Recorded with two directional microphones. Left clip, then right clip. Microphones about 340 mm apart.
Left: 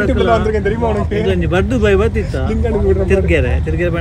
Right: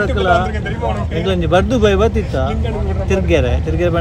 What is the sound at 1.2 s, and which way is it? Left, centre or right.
Speech, centre.